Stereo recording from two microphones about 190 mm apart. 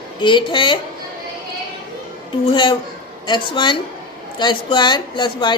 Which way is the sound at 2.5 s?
25° left (ahead or behind).